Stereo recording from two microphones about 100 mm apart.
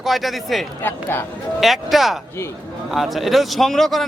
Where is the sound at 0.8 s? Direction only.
20° left (ahead or behind).